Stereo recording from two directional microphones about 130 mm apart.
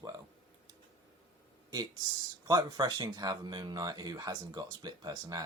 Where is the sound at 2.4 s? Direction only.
30° right (ahead or behind).